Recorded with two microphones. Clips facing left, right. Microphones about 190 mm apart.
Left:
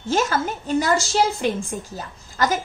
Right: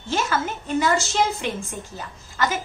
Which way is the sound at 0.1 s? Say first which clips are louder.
Left 3 dB; 40° left (ahead or behind).